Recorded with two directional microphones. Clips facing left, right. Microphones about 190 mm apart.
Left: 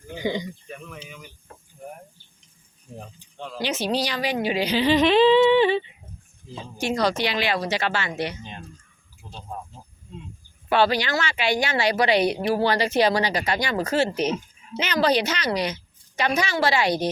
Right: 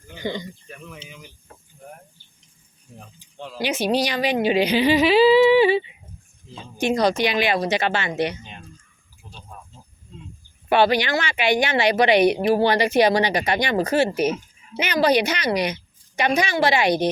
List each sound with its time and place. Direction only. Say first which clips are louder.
0.1 s speech: left 2 dB; 10° left (ahead or behind)
3.3 s a woman's voice: right 2 dB; 10° right (ahead or behind)
6.7 s speech: right 4 dB; 20° right (ahead or behind)
10.7 s a woman's voice: right 3 dB; 15° right (ahead or behind)